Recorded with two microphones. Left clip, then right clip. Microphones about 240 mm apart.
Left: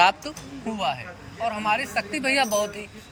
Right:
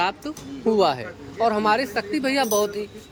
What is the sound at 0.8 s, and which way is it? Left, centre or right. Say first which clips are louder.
Speech: right 4 dB; right.